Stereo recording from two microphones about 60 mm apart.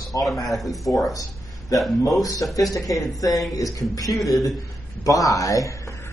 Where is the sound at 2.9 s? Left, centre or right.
Left.